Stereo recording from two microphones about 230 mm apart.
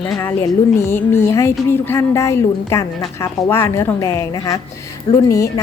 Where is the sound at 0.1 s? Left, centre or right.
Centre.